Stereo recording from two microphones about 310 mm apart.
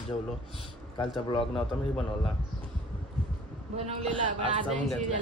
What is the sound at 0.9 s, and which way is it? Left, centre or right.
Speech, centre.